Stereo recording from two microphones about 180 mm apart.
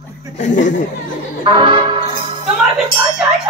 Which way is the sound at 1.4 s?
25° right (ahead or behind).